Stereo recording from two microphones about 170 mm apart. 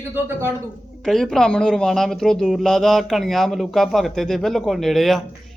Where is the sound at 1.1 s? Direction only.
Centre (ahead or behind).